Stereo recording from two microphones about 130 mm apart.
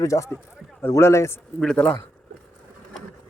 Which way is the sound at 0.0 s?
25° left (ahead or behind).